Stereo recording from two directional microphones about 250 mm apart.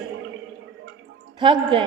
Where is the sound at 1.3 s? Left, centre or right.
Centre.